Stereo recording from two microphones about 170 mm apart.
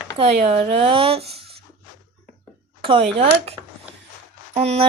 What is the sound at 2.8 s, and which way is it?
Speech, 35° right (ahead or behind).